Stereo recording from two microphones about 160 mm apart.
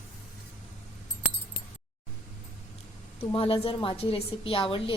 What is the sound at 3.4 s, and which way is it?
A woman's voice, 35° left (ahead or behind).